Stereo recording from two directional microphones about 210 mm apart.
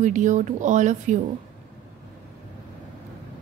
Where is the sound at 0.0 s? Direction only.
35° right (ahead or behind).